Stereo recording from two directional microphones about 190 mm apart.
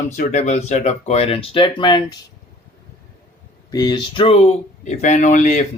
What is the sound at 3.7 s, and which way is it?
Speech, 20° left (ahead or behind).